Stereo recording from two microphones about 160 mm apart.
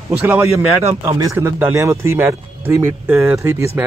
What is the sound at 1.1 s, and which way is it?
Speech, 20° right (ahead or behind).